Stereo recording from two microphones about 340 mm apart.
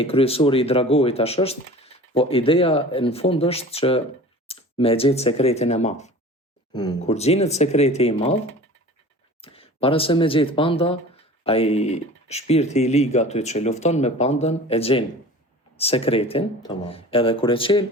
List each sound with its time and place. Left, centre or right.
0.0 s speech: centre
9.4 s speech: centre